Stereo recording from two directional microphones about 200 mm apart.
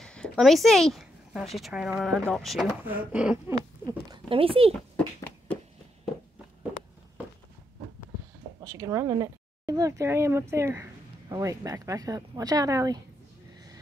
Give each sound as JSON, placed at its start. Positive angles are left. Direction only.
{"t": 0.0, "sound": "a sound", "side_deg": 5}
{"t": 1.6, "sound": "speech", "side_deg": -5}
{"t": 4.3, "sound": "speech", "side_deg": -30}
{"t": 8.7, "sound": "speech", "side_deg": -15}